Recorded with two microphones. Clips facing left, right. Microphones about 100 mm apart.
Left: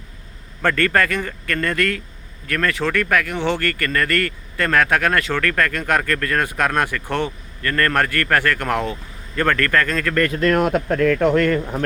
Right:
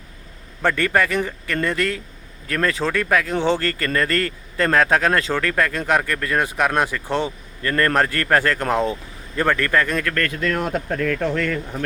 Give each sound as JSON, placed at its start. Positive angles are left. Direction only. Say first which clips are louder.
{"t": 0.8, "sound": "a man's voice", "louder": "left 1 dB", "side_deg": -20}
{"t": 10.4, "sound": "speech", "louder": "left 7 dB", "side_deg": 60}